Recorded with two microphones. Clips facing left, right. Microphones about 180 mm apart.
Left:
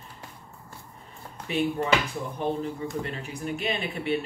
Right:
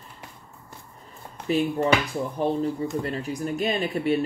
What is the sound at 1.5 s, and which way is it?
Speech, 40° right (ahead or behind).